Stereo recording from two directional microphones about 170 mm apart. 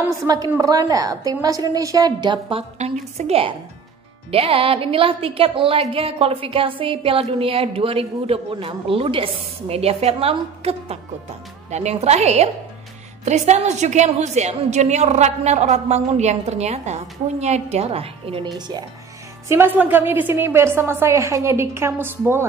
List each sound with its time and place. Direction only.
0.5 s a woman's voice: 20° right (ahead or behind)
2.8 s a woman's voice: 40° right (ahead or behind)
19.4 s a woman's voice: 15° right (ahead or behind)